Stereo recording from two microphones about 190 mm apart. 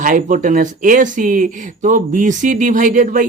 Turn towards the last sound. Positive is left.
turn(degrees=-40)  # may be behind; listen again after turning